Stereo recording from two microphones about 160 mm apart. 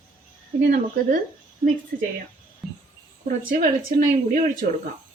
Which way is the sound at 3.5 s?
60° right (ahead or behind).